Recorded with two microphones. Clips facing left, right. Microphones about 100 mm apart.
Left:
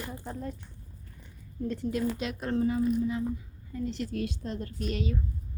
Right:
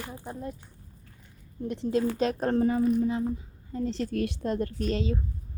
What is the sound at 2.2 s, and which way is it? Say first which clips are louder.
Speech: right 8 dB; 40° right (ahead or behind).